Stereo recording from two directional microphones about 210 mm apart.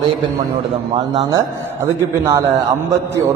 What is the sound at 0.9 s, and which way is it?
A man's voice, 20° right (ahead or behind).